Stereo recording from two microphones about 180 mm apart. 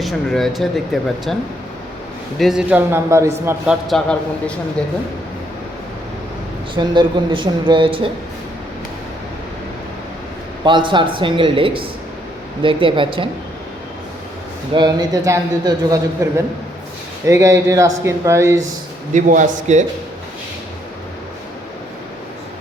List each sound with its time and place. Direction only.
0.0 s a man's voice: centre (ahead or behind)
2.4 s speech: 5° right (ahead or behind)
3.7 s a man's voice: centre (ahead or behind)
6.7 s speech: 25° right (ahead or behind)
10.6 s speech: 25° right (ahead or behind)
14.7 s speech: 25° right (ahead or behind)
19.1 s a man's voice: 45° right (ahead or behind)